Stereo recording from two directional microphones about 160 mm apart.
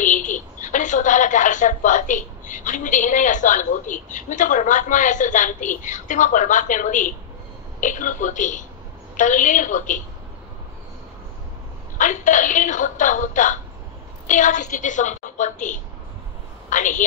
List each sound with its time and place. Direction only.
0.0 s a woman's voice: 50° left (ahead or behind)
12.0 s a woman's voice: 50° left (ahead or behind)